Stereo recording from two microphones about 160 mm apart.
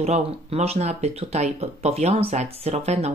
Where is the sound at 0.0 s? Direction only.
45° right (ahead or behind).